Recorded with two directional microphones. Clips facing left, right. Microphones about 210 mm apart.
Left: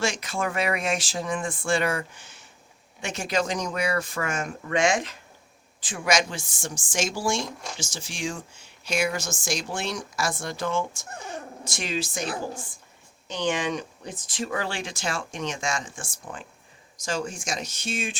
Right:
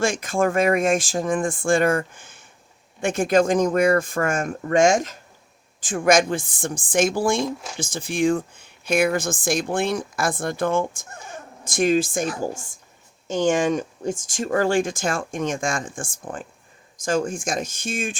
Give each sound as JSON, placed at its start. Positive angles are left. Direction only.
{"t": 0.0, "sound": "speech", "side_deg": -50}